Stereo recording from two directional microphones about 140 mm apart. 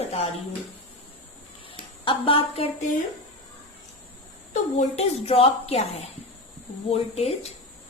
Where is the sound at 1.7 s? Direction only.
40° left (ahead or behind).